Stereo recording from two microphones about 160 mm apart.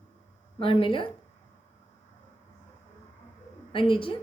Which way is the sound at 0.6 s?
35° left (ahead or behind).